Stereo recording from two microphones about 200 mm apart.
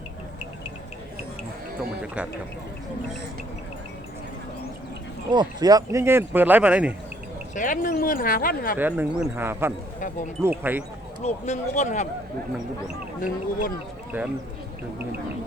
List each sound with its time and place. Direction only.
2.0 s speech: 5° right (ahead or behind)
5.3 s speech: 20° right (ahead or behind)
7.5 s speech: 40° left (ahead or behind)
8.8 s speech: 10° right (ahead or behind)
11.2 s speech: 35° left (ahead or behind)
13.2 s speech: 45° left (ahead or behind)
14.1 s speech: 10° right (ahead or behind)